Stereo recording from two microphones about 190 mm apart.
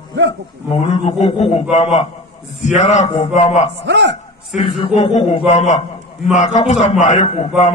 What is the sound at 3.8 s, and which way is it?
Speech, 70° right (ahead or behind).